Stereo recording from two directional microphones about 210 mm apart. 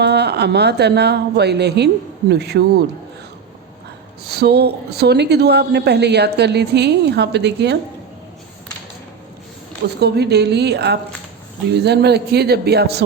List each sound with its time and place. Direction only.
0.0 s speech: 50° right (ahead or behind)
4.3 s speech: 50° right (ahead or behind)
10.0 s speech: 50° right (ahead or behind)